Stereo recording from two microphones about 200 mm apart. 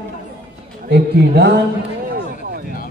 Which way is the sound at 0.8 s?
55° right (ahead or behind).